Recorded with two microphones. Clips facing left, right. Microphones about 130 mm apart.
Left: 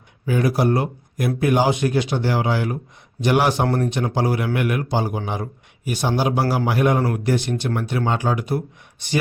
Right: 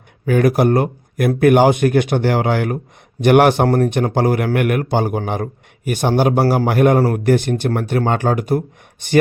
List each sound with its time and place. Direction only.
0.3 s a man's voice: 60° right (ahead or behind)